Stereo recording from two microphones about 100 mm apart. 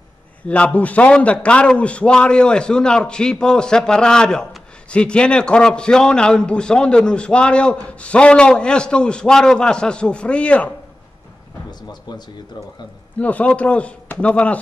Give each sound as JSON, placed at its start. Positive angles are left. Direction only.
{"t": 0.5, "sound": "a man's voice", "side_deg": 15}
{"t": 13.2, "sound": "a man's voice", "side_deg": 15}